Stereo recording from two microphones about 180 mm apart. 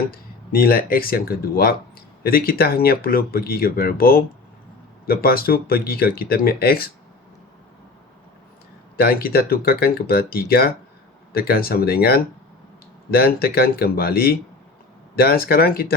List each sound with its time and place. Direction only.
0.1 s speech: 55° left (ahead or behind)
9.0 s speech: 55° left (ahead or behind)